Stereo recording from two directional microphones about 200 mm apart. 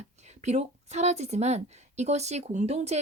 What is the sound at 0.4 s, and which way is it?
A woman's voice, 35° right (ahead or behind).